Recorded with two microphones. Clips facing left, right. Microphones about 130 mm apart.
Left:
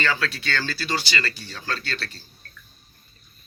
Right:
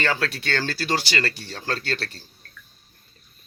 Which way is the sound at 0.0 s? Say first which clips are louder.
Right 1 dB; 55° right (ahead or behind).